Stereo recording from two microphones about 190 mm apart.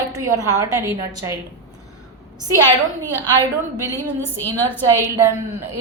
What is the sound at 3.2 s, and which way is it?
Speech, 20° right (ahead or behind).